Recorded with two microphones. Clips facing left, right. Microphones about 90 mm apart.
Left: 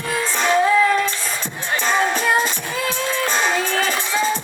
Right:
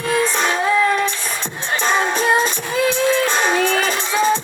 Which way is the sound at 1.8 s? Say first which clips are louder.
Right 1 dB; 20° right (ahead or behind).